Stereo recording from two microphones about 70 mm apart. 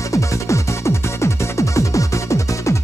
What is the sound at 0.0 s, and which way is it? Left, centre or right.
Music, left.